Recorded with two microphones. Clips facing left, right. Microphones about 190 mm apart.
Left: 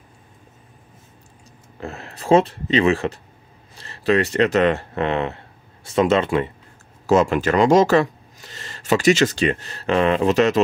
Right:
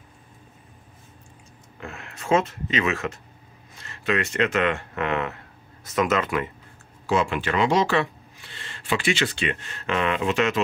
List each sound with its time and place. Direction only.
1.8 s speech: 35° left (ahead or behind)
7.1 s speech: 40° left (ahead or behind)